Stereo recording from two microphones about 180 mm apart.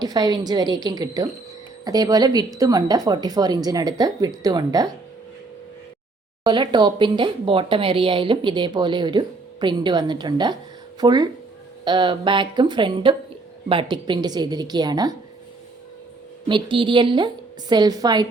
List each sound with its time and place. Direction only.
0.0 s speech: 20° right (ahead or behind)
6.4 s speech: 25° right (ahead or behind)
16.5 s speech: 25° right (ahead or behind)